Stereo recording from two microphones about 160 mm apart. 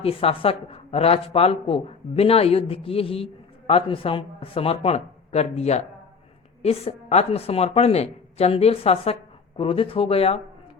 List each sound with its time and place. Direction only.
0.0 s speech: 35° left (ahead or behind)